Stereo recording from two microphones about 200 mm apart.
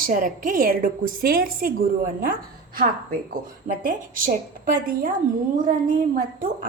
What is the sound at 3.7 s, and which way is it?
Speech, 45° right (ahead or behind).